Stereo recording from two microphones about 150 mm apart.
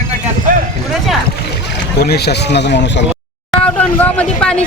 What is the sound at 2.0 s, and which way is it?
Speech, 90° left.